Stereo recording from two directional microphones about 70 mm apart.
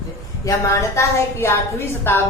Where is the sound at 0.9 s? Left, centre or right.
Left.